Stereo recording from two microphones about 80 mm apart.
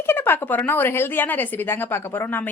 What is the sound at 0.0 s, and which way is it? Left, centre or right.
Speech, left.